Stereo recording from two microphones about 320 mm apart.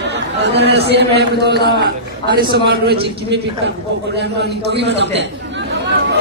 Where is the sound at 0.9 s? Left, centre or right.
Right.